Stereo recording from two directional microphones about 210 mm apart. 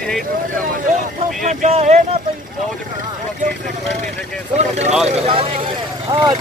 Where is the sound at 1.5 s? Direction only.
30° right (ahead or behind).